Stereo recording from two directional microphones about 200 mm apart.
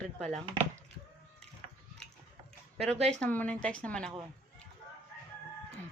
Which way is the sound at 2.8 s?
30° right (ahead or behind).